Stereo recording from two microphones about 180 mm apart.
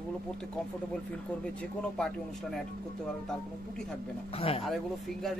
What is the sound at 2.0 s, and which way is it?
Speech, 5° left (ahead or behind).